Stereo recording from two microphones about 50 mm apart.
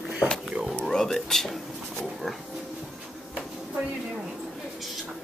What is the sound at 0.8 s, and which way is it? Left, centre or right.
Speech, centre.